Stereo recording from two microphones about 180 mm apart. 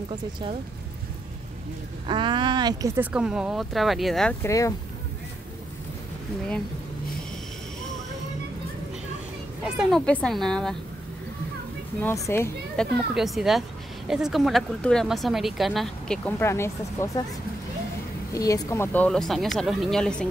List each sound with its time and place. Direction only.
2.0 s speech: 25° right (ahead or behind)
3.0 s a woman's voice: 5° right (ahead or behind)
4.4 s speech: 15° left (ahead or behind)
9.7 s a woman's voice: centre (ahead or behind)
12.0 s speech: 15° left (ahead or behind)
12.7 s a woman's voice: centre (ahead or behind)
18.3 s a woman's voice: 20° left (ahead or behind)